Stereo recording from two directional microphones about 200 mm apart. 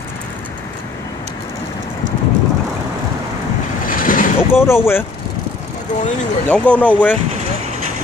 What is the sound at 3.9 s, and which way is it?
Vehicle, 45° left (ahead or behind).